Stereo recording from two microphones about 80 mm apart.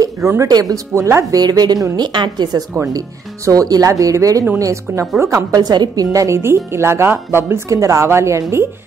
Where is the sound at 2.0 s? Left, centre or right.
Right.